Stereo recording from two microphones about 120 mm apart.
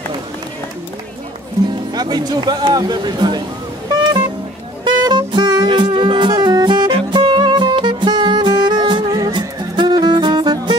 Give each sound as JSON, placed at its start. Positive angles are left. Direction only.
{"t": 2.0, "sound": "speech", "side_deg": -35}
{"t": 4.8, "sound": "music", "side_deg": -40}